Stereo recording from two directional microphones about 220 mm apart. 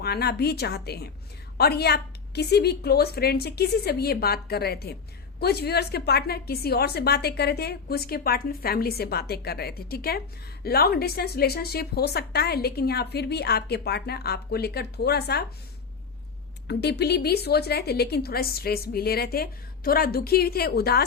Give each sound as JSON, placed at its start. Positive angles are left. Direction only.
{"t": 0.0, "sound": "speech", "side_deg": 45}
{"t": 16.6, "sound": "speech", "side_deg": 50}